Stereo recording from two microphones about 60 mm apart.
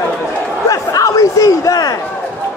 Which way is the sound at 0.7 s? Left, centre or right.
Left.